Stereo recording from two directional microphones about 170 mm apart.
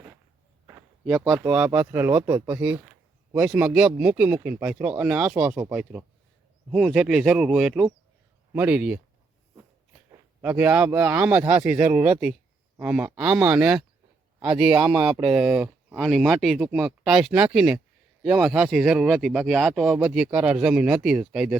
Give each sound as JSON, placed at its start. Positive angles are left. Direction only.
{"t": 1.0, "sound": "speech", "side_deg": 0}
{"t": 10.4, "sound": "speech", "side_deg": -10}
{"t": 14.8, "sound": "speech", "side_deg": -25}
{"t": 15.3, "sound": "speech", "side_deg": -5}
{"t": 16.0, "sound": "speech", "side_deg": 0}